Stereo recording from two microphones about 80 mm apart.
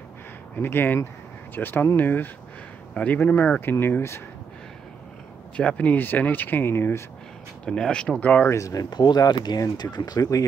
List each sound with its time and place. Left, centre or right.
0.6 s speech: left
3.8 s speech: left
5.6 s speech: centre
7.6 s speech: centre
8.5 s speech: left
8.9 s speech: left